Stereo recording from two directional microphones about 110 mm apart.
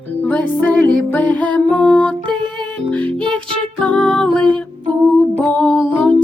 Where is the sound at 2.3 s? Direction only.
45° right (ahead or behind).